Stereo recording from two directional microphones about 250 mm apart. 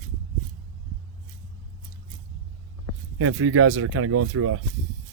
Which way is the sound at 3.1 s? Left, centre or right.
Right.